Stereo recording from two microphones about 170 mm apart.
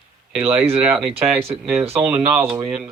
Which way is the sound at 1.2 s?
35° right (ahead or behind).